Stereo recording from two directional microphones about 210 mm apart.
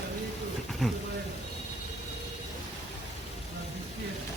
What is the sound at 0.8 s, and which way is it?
Speech, centre (ahead or behind).